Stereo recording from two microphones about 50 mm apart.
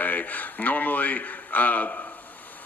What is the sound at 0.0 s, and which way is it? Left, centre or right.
A man's voice, left.